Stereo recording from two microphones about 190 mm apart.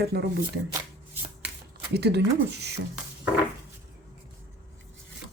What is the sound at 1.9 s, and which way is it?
Speech, 60° right (ahead or behind).